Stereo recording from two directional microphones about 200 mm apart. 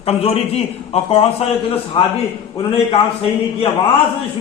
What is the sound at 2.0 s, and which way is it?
Speech, 25° left (ahead or behind).